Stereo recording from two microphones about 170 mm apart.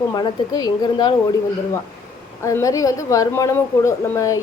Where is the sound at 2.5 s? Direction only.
20° left (ahead or behind).